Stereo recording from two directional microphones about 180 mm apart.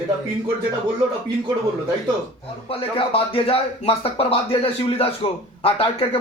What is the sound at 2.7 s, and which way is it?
Speech, 30° left (ahead or behind).